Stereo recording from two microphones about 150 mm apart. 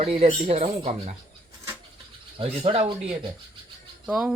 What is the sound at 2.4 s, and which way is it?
Speech, 40° right (ahead or behind).